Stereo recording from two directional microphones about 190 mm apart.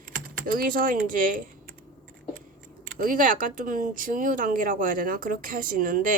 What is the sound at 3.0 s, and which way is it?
Speech, 45° right (ahead or behind).